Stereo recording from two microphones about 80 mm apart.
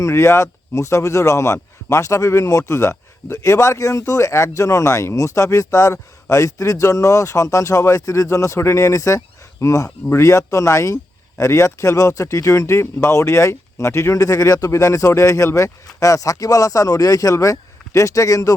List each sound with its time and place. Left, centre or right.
0.0 s a man's voice: left